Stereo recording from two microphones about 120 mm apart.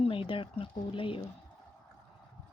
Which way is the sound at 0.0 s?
45° left (ahead or behind).